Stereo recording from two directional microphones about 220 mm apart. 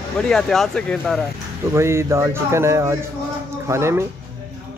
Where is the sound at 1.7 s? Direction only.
10° right (ahead or behind).